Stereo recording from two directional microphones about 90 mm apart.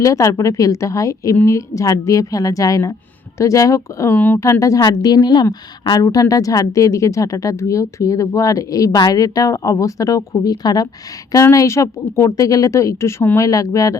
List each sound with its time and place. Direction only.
0.0 s a woman's voice: 40° left (ahead or behind)
4.9 s a woman's voice: 50° left (ahead or behind)
6.0 s a woman's voice: 40° left (ahead or behind)
11.5 s a woman's voice: 35° left (ahead or behind)